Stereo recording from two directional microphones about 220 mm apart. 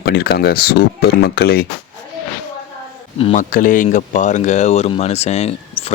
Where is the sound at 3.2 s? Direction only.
25° left (ahead or behind).